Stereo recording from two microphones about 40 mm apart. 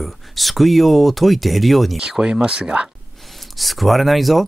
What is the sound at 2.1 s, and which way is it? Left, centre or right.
Speech, right.